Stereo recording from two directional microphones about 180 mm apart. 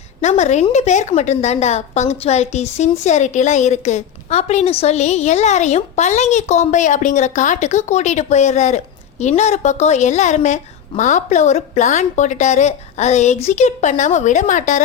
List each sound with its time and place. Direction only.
0.2 s a woman's voice: 40° left (ahead or behind)